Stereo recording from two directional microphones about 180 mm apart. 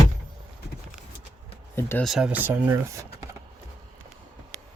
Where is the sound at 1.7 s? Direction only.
15° left (ahead or behind).